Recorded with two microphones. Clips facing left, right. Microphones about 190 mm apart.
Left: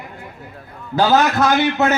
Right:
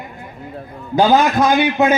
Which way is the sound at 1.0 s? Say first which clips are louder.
Right 2 dB; 15° right (ahead or behind).